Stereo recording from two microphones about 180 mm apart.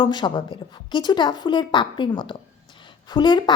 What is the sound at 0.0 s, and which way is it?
A woman's voice, 25° left (ahead or behind).